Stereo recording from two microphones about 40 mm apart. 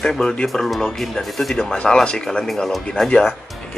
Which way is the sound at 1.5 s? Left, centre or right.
Centre.